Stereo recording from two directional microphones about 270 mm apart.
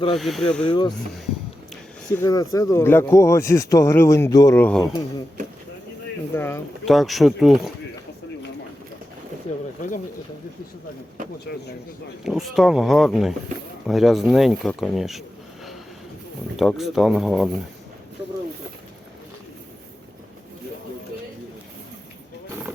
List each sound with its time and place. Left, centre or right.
0.1 s speech: centre
0.6 s speech: centre
2.1 s speech: centre
6.3 s speech: centre
12.2 s speech: centre
16.6 s speech: centre